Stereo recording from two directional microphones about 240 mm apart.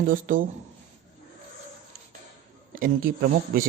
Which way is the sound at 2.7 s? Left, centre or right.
Right.